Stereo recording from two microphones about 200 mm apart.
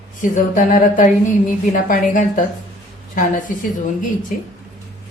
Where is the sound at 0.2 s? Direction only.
40° left (ahead or behind).